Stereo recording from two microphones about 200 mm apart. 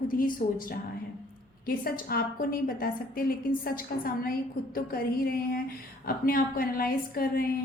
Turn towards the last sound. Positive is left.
turn(degrees=45)  # may be behind; listen again after turning